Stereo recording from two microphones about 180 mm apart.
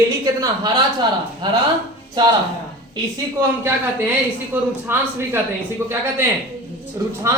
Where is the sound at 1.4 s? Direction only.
25° right (ahead or behind).